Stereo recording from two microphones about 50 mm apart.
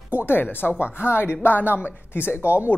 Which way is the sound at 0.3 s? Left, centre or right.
Left.